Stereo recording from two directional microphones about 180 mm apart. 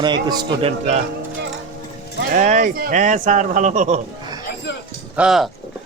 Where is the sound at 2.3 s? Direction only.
45° right (ahead or behind).